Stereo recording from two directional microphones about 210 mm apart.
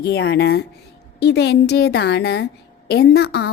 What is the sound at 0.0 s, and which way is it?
A woman's voice, 50° left (ahead or behind).